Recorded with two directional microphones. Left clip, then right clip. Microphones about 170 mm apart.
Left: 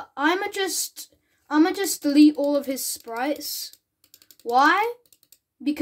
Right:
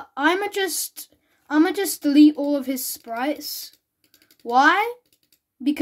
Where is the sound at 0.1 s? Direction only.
15° right (ahead or behind).